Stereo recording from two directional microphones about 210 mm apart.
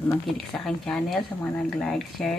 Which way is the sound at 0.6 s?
Centre (ahead or behind).